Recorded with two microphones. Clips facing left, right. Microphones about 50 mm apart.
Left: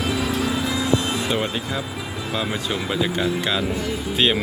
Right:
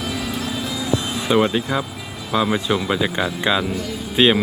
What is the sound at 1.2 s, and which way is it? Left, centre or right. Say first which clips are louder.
Speech: right 6 dB; right.